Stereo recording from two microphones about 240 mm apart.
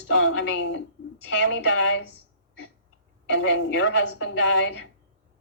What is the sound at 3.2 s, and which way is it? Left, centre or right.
A woman's voice, left.